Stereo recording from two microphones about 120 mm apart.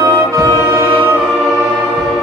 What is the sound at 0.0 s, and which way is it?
Music, 25° right (ahead or behind).